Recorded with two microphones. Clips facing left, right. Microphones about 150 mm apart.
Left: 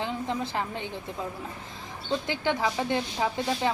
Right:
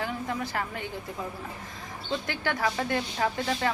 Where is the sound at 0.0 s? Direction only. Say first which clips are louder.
Left 1 dB; 20° left (ahead or behind).